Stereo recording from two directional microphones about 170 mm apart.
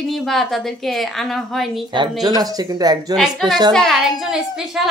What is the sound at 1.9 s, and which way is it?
Speech, 25° right (ahead or behind).